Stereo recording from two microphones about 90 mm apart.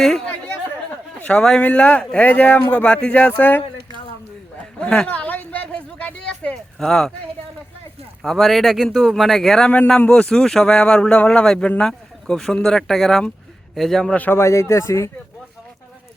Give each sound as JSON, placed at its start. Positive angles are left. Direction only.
{"t": 0.3, "sound": "chatter", "side_deg": 15}
{"t": 1.2, "sound": "speech", "side_deg": 10}
{"t": 4.8, "sound": "a woman's voice", "side_deg": 5}
{"t": 5.0, "sound": "a sound", "side_deg": 15}
{"t": 8.2, "sound": "speech", "side_deg": 0}
{"t": 14.2, "sound": "speech", "side_deg": 25}